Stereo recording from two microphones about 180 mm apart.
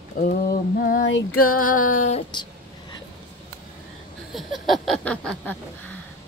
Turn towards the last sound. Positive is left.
turn(degrees=5)  # may be behind; listen again after turning